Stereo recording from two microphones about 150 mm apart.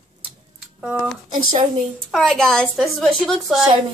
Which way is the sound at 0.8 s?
Centre (ahead or behind).